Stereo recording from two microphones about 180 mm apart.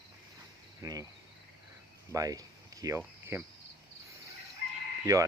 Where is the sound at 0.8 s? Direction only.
20° right (ahead or behind).